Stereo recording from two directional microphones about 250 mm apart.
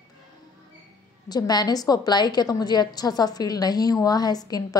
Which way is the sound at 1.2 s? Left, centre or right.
Centre.